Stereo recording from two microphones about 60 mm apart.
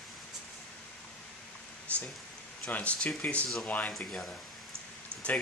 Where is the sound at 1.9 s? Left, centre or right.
Left.